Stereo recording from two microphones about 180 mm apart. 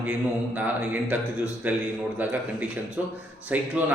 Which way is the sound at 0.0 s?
5° right (ahead or behind).